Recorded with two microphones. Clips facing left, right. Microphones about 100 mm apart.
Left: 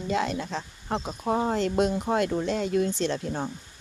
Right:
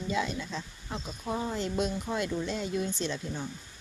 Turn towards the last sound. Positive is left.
turn(degrees=75)  # may be behind; listen again after turning